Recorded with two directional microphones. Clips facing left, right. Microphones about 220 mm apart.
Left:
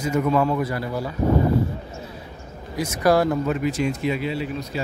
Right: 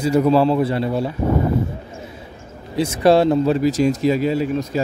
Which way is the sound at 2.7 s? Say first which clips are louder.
Right 5 dB; 25° right (ahead or behind).